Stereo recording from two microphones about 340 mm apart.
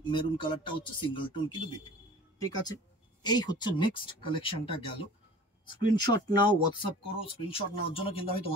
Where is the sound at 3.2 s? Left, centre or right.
Centre.